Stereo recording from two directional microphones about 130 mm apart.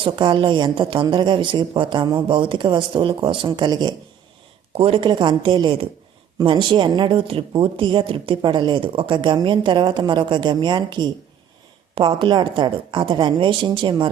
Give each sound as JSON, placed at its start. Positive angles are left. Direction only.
{"t": 0.0, "sound": "speech", "side_deg": -40}